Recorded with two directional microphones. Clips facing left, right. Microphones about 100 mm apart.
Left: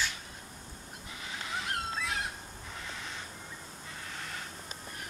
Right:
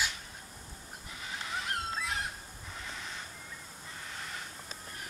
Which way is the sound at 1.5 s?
Centre (ahead or behind).